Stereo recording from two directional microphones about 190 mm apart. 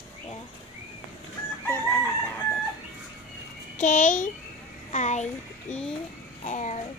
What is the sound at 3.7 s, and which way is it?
A child's voice, 40° left (ahead or behind).